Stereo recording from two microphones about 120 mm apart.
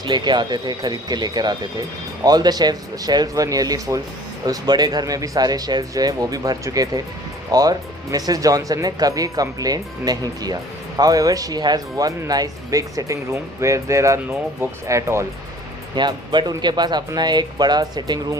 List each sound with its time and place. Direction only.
0.0 s speech: 40° right (ahead or behind); by 15.3 s 25° right (ahead or behind)
16.0 s speech: 40° right (ahead or behind)